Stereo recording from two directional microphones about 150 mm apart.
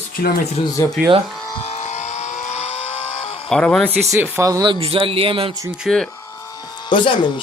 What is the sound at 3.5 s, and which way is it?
Speech, 5° left (ahead or behind).